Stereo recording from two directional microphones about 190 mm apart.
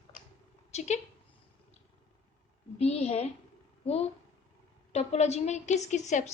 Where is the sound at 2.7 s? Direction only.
35° left (ahead or behind).